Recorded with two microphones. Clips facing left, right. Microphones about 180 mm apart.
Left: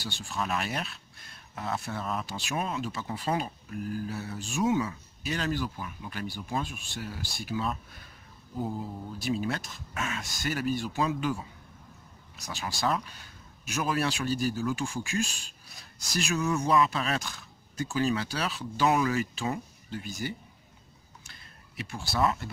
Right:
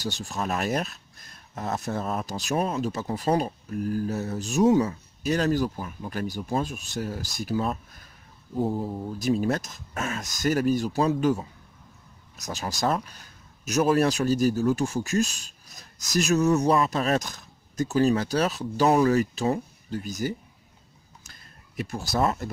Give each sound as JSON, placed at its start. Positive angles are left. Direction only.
{"t": 0.0, "sound": "speech", "side_deg": -40}
{"t": 12.4, "sound": "speech", "side_deg": -40}
{"t": 21.2, "sound": "a sound", "side_deg": -40}